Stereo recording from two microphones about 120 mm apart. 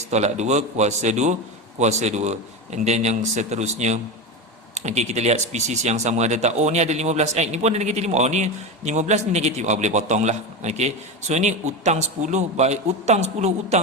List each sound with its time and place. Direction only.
0.1 s speech: 70° right (ahead or behind)